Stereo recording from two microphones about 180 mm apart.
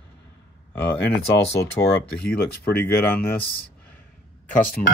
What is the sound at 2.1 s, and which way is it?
Speech, 10° left (ahead or behind).